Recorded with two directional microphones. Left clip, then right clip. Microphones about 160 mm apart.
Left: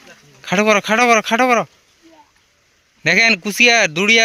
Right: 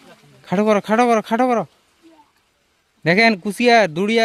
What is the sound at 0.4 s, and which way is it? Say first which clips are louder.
Speech: left 3 dB; 20° right (ahead or behind).